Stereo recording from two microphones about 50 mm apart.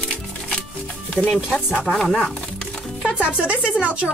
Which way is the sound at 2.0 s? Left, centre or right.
Centre.